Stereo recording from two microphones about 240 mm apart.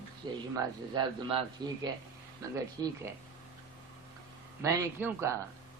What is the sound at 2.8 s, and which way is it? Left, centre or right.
Speech, centre.